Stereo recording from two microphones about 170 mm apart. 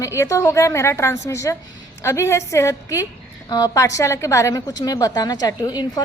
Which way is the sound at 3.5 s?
20° left (ahead or behind).